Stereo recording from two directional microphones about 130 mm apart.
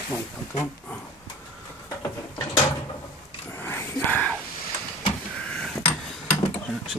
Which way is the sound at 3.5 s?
15° left (ahead or behind).